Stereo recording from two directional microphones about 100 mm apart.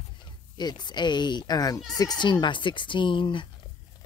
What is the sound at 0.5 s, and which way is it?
Speech, 45° left (ahead or behind).